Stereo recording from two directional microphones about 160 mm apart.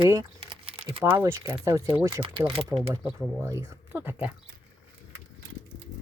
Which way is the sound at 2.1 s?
30° right (ahead or behind).